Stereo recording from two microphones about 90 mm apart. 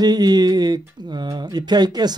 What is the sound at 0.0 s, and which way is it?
Speech, 50° right (ahead or behind).